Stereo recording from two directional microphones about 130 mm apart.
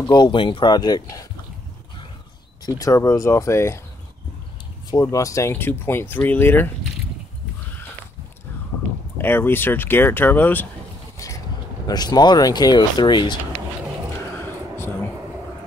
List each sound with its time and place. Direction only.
0.0 s speech: 35° left (ahead or behind)
2.6 s speech: 25° left (ahead or behind)
4.9 s speech: 25° left (ahead or behind)
9.2 s speech: 15° left (ahead or behind)
11.1 s vehicle: 25° left (ahead or behind)
11.9 s speech: 30° left (ahead or behind)
14.4 s a sound: 15° left (ahead or behind)